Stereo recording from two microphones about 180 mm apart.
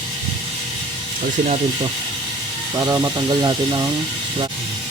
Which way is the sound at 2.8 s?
20° right (ahead or behind).